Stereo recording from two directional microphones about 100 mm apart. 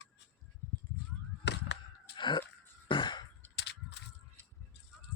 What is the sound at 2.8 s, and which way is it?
Throat clearing, 55° left (ahead or behind).